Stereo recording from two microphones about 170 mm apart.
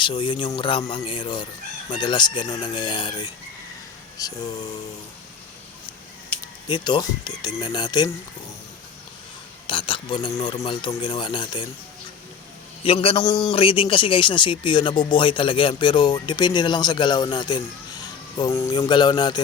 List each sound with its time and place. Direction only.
0.0 s a man's voice: 30° left (ahead or behind)
6.7 s a man's voice: 25° left (ahead or behind)
9.6 s a man's voice: 30° left (ahead or behind)
12.8 s a man's voice: 35° left (ahead or behind)